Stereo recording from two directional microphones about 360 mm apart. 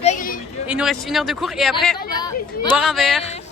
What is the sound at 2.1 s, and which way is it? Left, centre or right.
Speech, centre.